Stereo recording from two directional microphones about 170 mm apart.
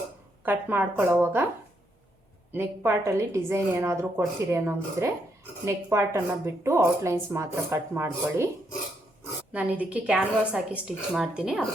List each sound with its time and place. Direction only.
0.4 s speech: 10° right (ahead or behind)
2.5 s speech: 15° right (ahead or behind)
9.5 s speech: 10° right (ahead or behind)